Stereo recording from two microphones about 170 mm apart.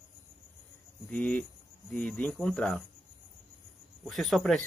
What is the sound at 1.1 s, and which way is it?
Speech, 10° left (ahead or behind).